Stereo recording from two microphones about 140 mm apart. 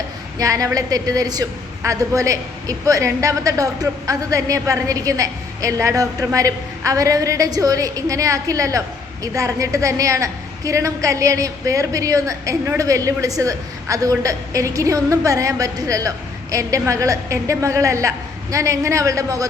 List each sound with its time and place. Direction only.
0.3 s a woman's voice: 25° right (ahead or behind)